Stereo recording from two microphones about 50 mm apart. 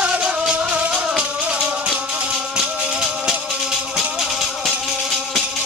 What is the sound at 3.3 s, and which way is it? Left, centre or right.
Music, centre.